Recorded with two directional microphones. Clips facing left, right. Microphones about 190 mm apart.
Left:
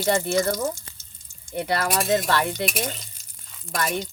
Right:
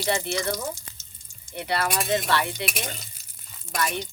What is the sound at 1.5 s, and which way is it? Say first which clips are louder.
Speech: left 3 dB; 50° left (ahead or behind).